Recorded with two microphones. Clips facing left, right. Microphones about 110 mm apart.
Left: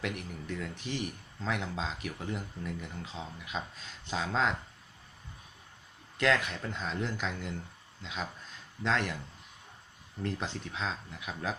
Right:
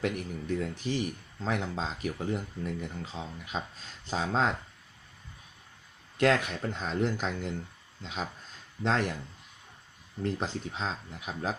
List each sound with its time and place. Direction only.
0.0 s speech: 40° right (ahead or behind)
6.1 s speech: 40° right (ahead or behind)
10.2 s speech: 35° right (ahead or behind)